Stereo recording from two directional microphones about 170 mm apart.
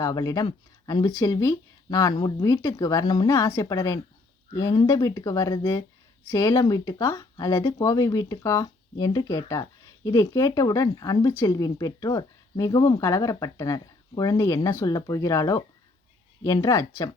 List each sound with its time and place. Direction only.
0.0 s speech: 20° left (ahead or behind)